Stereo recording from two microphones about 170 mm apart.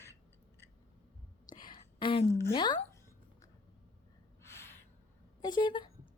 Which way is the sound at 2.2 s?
15° left (ahead or behind).